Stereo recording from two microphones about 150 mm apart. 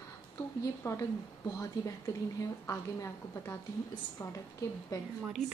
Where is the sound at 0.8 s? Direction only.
20° left (ahead or behind).